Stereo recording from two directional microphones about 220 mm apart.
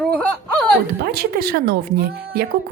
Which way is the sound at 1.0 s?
45° right (ahead or behind).